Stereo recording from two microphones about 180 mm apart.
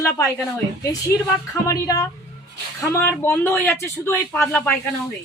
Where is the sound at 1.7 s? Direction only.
15° left (ahead or behind).